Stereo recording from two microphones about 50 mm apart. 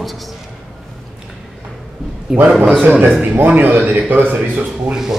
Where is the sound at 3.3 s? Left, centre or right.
Right.